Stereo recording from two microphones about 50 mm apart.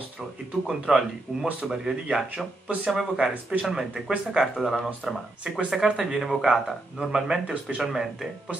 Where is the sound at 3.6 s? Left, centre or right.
Centre.